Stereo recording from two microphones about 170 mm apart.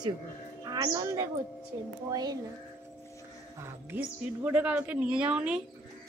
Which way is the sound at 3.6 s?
15° right (ahead or behind).